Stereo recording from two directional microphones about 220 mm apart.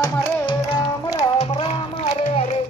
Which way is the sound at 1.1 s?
25° left (ahead or behind).